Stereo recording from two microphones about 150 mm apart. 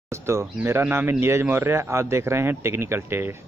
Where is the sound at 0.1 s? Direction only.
15° right (ahead or behind).